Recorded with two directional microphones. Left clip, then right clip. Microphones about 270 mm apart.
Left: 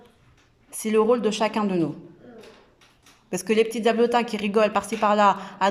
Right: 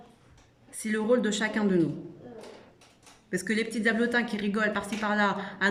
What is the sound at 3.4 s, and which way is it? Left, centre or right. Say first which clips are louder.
A woman's voice: left 8 dB; centre.